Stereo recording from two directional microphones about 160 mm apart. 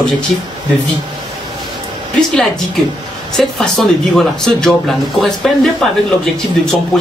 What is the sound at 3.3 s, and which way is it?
Speech, 5° left (ahead or behind).